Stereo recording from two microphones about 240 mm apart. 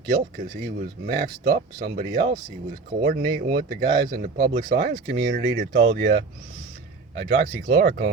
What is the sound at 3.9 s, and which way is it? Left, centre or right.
Speech, centre.